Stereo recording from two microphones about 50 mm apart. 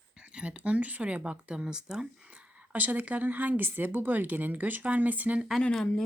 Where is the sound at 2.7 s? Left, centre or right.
Right.